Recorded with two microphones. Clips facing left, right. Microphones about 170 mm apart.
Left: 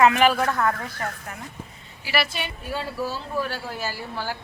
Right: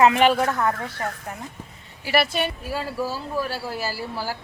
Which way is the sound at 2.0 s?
55° right (ahead or behind).